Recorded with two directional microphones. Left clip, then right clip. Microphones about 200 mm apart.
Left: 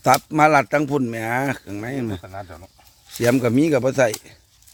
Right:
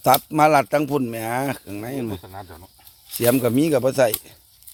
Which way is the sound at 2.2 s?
15° left (ahead or behind).